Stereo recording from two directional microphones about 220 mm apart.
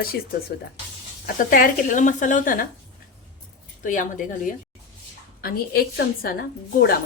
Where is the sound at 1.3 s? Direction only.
40° left (ahead or behind).